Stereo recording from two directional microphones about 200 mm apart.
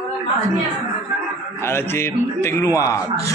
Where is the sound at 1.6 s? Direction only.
10° left (ahead or behind).